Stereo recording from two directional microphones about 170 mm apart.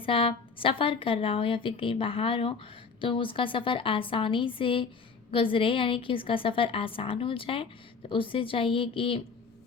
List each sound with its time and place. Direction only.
0.0 s a woman's voice: 30° left (ahead or behind)